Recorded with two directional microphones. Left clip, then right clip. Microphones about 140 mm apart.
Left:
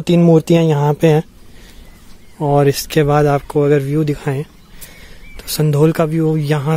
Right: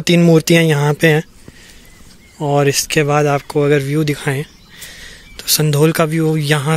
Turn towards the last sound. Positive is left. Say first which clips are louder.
# right 1 dB
turn(degrees=0)  # may be behind; listen again after turning